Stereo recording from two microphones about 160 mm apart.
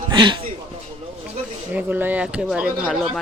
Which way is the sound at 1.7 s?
10° right (ahead or behind).